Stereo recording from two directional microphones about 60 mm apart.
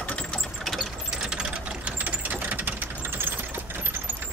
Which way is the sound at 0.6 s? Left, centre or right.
Centre.